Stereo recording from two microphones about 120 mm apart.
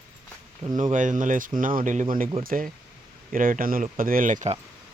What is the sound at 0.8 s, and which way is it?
Speech, 90° right.